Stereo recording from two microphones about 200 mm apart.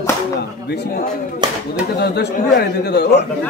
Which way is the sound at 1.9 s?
55° left (ahead or behind).